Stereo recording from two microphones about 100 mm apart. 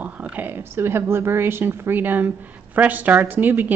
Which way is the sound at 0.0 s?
15° right (ahead or behind).